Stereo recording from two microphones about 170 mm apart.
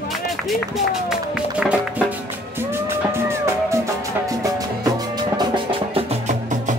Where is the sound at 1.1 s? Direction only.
5° right (ahead or behind).